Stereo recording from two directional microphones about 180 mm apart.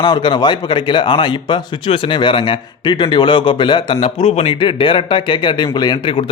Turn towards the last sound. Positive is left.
turn(degrees=30)  # may be behind; listen again after turning